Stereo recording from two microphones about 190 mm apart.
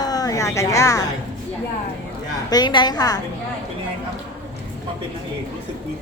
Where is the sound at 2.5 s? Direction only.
20° left (ahead or behind).